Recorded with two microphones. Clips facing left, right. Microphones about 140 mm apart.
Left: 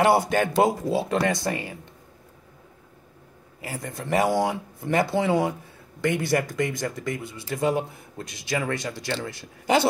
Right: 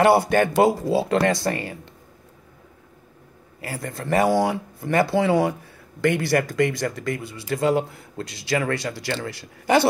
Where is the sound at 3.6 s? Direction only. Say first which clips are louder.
Right 3 dB; 15° left (ahead or behind).